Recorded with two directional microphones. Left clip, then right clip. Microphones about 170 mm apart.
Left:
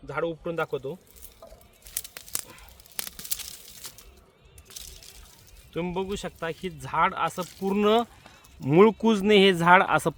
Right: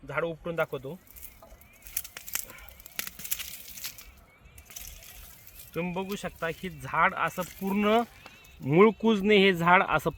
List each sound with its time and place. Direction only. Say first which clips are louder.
0.1 s speech: left 2 dB; 30° left (ahead or behind)
3.8 s a sound: right 4 dB; 30° right (ahead or behind)
5.7 s speech: left 3 dB; 35° left (ahead or behind)
7.6 s speech: left 3 dB; 50° left (ahead or behind)
8.6 s speech: left 2 dB; 30° left (ahead or behind)